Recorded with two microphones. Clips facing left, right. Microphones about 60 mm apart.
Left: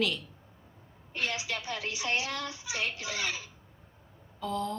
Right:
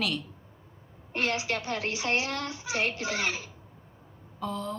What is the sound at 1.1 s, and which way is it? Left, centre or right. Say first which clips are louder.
A woman's voice: right 5 dB; right.